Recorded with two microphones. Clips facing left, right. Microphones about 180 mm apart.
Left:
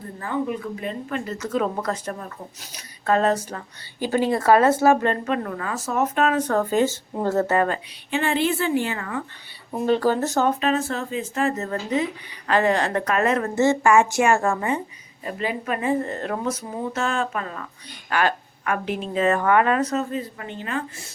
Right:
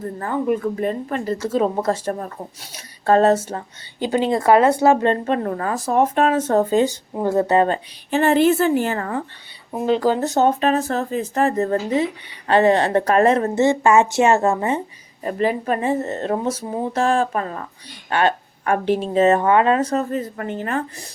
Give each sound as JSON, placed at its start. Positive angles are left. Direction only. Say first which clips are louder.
{"t": 0.0, "sound": "a woman's voice", "louder": "right 4 dB", "side_deg": -45}
{"t": 8.1, "sound": "a woman's voice", "louder": "right 7 dB", "side_deg": -40}
{"t": 9.7, "sound": "speech", "louder": "right 2 dB", "side_deg": -15}
{"t": 10.6, "sound": "a woman's voice", "louder": "right 4 dB", "side_deg": -40}
{"t": 15.2, "sound": "a woman's voice", "louder": "right 7 dB", "side_deg": -40}
{"t": 18.1, "sound": "a woman's voice", "louder": "right 3 dB", "side_deg": -25}